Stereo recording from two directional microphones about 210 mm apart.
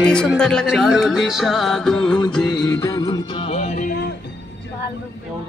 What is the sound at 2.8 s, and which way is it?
Music, 15° left (ahead or behind).